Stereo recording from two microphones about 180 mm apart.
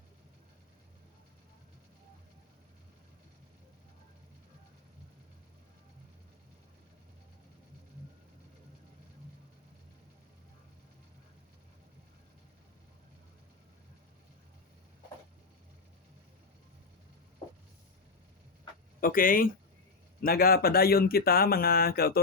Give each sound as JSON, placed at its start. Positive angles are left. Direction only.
{"t": 18.9, "sound": "speech", "side_deg": 50}